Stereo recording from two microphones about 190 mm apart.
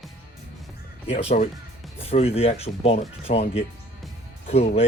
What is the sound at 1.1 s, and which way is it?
A man's voice, 35° left (ahead or behind).